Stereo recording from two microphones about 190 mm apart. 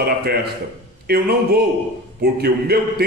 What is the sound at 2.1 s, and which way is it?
Speech, 55° right (ahead or behind).